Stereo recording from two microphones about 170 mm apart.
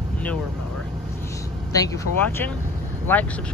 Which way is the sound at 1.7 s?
20° left (ahead or behind).